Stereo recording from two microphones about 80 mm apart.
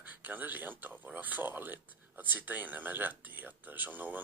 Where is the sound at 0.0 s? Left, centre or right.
Right.